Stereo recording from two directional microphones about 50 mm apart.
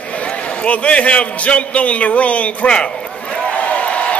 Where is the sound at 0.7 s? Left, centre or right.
Left.